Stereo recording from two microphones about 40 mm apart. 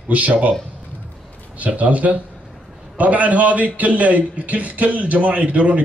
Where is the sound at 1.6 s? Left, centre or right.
Right.